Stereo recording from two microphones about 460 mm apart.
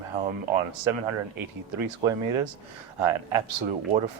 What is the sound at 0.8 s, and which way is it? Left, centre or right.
Speech, right.